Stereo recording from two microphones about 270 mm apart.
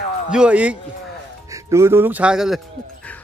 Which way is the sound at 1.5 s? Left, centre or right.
Centre.